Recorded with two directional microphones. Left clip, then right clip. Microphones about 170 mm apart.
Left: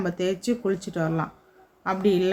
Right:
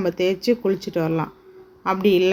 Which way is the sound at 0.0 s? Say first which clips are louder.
Right 6 dB; 10° right (ahead or behind).